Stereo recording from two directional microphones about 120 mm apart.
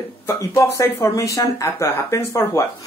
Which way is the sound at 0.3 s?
25° left (ahead or behind).